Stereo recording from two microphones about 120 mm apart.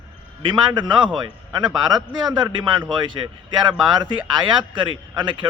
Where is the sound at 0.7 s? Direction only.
40° right (ahead or behind).